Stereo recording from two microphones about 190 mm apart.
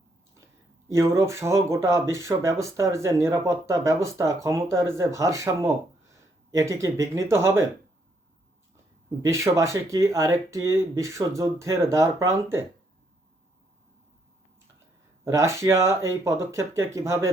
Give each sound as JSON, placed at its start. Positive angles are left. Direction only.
{"t": 0.9, "sound": "speech", "side_deg": -15}
{"t": 9.2, "sound": "speech", "side_deg": -15}
{"t": 15.2, "sound": "speech", "side_deg": -15}